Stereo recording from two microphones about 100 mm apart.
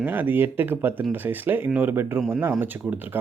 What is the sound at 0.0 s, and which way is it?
Speech, 20° right (ahead or behind).